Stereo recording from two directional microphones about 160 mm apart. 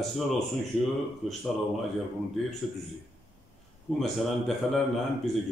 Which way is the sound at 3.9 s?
Centre (ahead or behind).